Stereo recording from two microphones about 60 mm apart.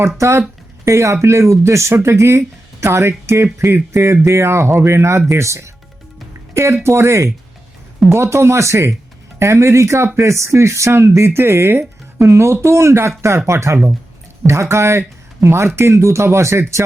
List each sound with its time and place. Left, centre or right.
0.2 s speech: right